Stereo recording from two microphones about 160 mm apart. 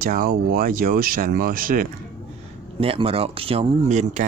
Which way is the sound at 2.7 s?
35° right (ahead or behind).